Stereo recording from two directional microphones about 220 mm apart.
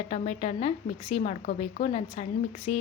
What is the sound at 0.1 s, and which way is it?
A woman's voice, 30° left (ahead or behind).